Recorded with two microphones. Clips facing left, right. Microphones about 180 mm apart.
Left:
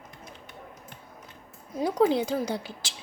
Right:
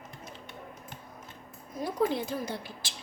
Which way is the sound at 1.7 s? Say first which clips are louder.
Left 6 dB; 75° left (ahead or behind).